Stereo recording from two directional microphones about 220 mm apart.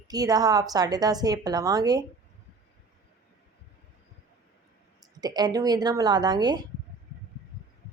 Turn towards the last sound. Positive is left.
turn(degrees=-20)  # may be behind; listen again after turning